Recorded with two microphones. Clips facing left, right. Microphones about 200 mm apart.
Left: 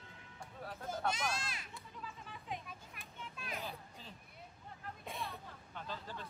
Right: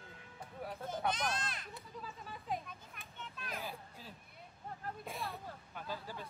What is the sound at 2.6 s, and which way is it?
Children playing, 5° left (ahead or behind).